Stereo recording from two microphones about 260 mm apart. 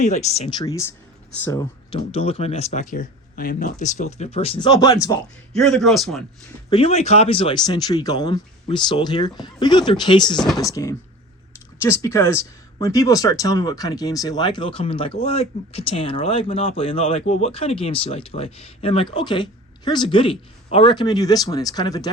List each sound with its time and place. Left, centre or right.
0.0 s speech: left
5.5 s a man's voice: centre
6.7 s speech: left